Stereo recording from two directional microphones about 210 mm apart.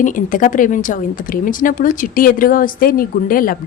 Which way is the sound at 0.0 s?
40° left (ahead or behind).